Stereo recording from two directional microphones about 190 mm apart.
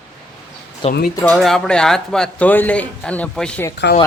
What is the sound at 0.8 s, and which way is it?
Speech, 30° left (ahead or behind).